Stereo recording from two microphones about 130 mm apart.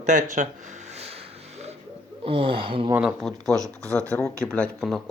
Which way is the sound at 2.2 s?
45° right (ahead or behind).